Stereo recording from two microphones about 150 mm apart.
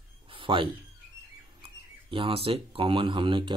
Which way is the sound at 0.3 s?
35° right (ahead or behind).